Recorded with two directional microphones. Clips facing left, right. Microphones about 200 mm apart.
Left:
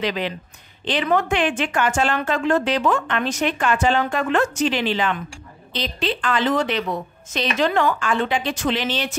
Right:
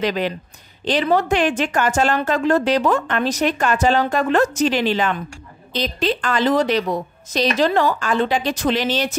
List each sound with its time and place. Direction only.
0.0 s speech: 45° right (ahead or behind)